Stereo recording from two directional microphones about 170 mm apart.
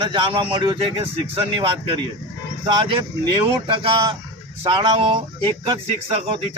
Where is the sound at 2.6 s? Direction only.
30° right (ahead or behind).